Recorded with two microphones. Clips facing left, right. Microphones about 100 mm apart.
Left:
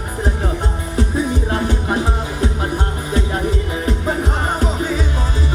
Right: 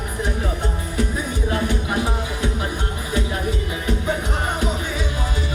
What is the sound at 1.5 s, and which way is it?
Music, 35° left (ahead or behind).